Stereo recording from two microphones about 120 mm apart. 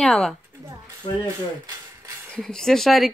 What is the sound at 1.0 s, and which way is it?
Speech, 40° left (ahead or behind).